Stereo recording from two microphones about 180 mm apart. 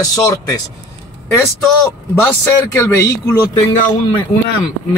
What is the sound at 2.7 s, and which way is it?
Speech, 15° left (ahead or behind).